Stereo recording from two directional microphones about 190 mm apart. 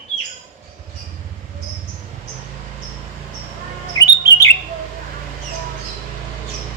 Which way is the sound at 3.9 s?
15° left (ahead or behind).